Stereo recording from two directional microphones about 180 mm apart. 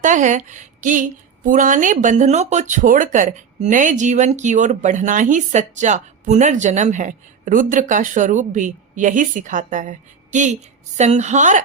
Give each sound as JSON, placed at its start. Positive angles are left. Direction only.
{"t": 0.0, "sound": "a woman's voice", "side_deg": -45}